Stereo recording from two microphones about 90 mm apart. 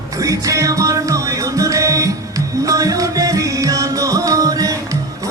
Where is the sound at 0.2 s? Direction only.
40° right (ahead or behind).